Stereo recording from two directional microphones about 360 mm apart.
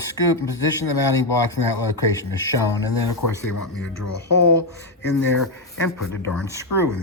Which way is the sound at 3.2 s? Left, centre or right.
Left.